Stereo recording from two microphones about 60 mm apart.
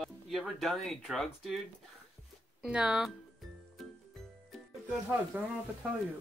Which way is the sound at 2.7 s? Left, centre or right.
Centre.